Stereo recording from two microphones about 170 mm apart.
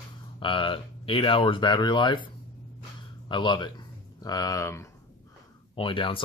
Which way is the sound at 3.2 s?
30° left (ahead or behind).